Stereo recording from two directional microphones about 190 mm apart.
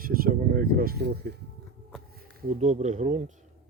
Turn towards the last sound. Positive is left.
turn(degrees=-35)  # may be behind; listen again after turning